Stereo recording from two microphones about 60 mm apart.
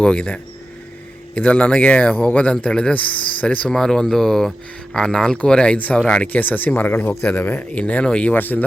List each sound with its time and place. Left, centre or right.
0.0 s speech: centre
1.4 s speech: left
3.8 s speech: centre
6.2 s speech: left